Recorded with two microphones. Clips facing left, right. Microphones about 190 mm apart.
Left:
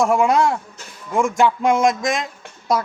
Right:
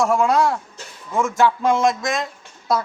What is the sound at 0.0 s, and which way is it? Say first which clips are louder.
Speech: left 1 dB; 15° left (ahead or behind).